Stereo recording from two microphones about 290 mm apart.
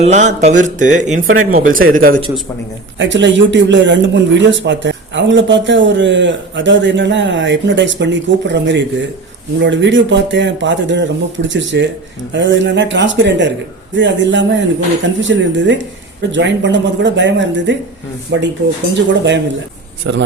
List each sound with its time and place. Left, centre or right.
0.0 s speech: right
3.0 s speech: right